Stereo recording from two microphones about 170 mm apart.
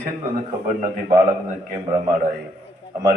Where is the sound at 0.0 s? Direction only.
50° right (ahead or behind).